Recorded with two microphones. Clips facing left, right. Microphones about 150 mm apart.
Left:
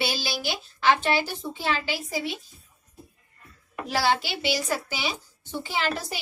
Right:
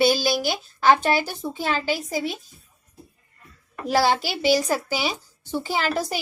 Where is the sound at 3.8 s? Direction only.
40° right (ahead or behind).